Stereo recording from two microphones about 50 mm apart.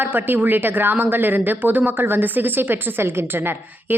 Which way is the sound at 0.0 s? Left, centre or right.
Right.